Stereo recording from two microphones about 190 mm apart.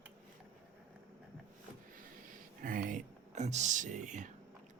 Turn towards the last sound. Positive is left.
turn(degrees=-40)  # may be behind; listen again after turning